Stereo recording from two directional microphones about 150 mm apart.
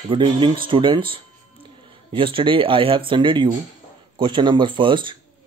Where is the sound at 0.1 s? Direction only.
35° right (ahead or behind).